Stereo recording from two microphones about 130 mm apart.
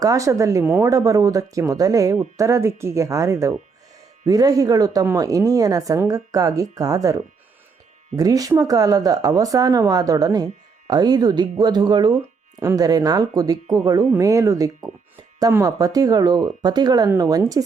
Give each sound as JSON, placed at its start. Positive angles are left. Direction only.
{"t": 0.0, "sound": "speech", "side_deg": -25}
{"t": 12.5, "sound": "speech", "side_deg": -25}